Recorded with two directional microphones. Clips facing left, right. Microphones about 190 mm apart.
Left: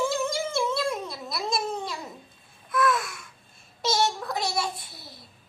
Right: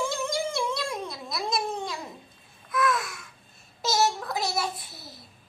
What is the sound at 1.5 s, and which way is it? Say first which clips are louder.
Cat: even; centre (ahead or behind).